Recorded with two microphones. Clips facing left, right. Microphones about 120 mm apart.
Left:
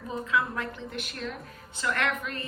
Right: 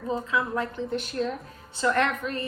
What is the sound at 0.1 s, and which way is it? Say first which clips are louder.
A woman's voice: right 2 dB; 30° right (ahead or behind).